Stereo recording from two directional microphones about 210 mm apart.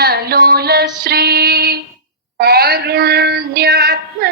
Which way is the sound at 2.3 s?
50° right (ahead or behind).